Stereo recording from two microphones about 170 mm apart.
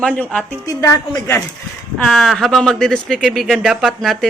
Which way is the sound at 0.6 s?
20° left (ahead or behind).